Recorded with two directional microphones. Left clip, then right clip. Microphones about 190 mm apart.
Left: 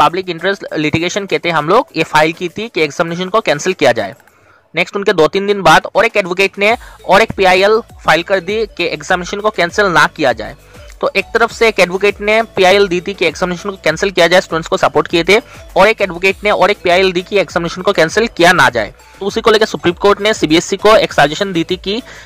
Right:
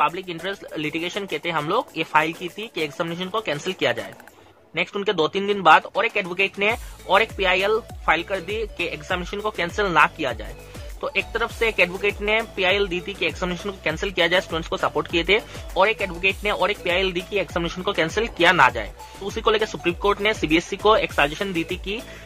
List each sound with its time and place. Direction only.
0.0 s speech: 40° left (ahead or behind)